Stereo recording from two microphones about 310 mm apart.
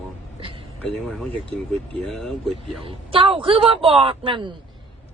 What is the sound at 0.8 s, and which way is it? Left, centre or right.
Speech, centre.